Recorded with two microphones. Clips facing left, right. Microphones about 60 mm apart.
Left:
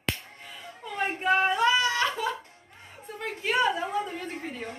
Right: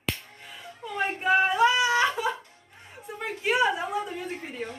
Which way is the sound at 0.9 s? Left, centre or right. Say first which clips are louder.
Right 2 dB; centre.